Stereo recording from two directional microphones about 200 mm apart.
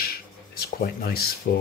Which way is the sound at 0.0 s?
50° left (ahead or behind).